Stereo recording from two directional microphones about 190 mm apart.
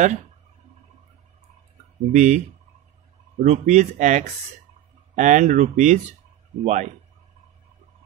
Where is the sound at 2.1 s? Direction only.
40° right (ahead or behind).